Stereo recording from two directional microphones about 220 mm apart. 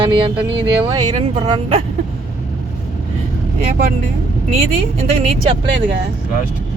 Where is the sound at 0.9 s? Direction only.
20° right (ahead or behind).